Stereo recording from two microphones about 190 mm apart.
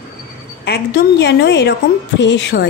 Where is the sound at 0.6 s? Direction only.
60° left (ahead or behind).